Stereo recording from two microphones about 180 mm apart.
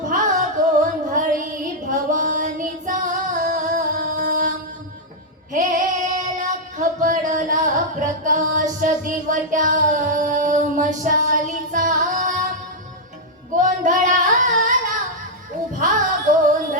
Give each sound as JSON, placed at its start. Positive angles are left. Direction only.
{"t": 0.0, "sound": "music", "side_deg": -45}
{"t": 1.9, "sound": "female singing", "side_deg": -45}
{"t": 5.5, "sound": "child singing", "side_deg": -45}
{"t": 8.8, "sound": "a sound", "side_deg": -45}
{"t": 13.6, "sound": "singing", "side_deg": -45}